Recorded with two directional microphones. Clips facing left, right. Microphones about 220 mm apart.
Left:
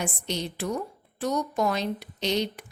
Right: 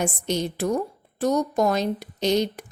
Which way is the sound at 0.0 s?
45° right (ahead or behind).